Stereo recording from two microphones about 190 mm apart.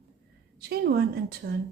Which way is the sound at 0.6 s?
55° right (ahead or behind).